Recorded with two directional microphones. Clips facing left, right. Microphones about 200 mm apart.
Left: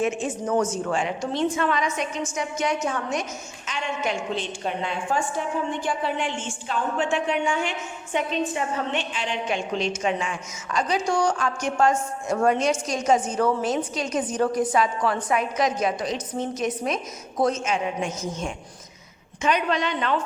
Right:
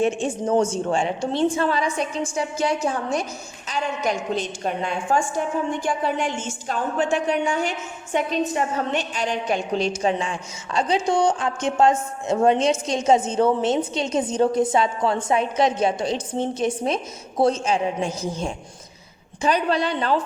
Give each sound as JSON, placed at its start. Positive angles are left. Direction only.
{"t": 0.0, "sound": "a woman's voice", "side_deg": -30}